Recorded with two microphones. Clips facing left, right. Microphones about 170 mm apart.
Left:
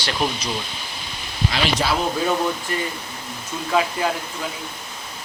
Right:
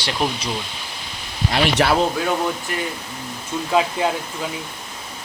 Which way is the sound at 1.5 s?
60° right (ahead or behind).